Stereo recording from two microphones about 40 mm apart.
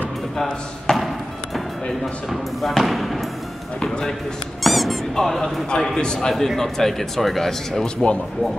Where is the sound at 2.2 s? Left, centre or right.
Centre.